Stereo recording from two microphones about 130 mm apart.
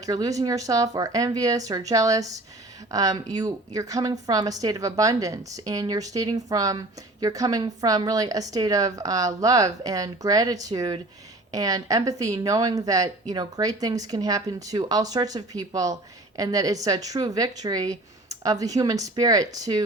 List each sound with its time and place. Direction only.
0.0 s a woman's voice: 25° right (ahead or behind)